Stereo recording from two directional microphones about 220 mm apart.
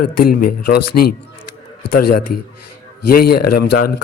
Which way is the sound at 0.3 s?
40° left (ahead or behind).